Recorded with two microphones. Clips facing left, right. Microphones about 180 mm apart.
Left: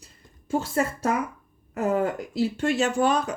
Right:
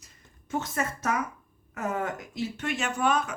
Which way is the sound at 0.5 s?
30° left (ahead or behind).